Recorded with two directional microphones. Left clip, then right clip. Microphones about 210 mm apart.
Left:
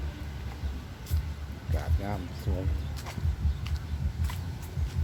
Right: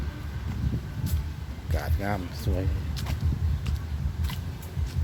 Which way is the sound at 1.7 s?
20° right (ahead or behind).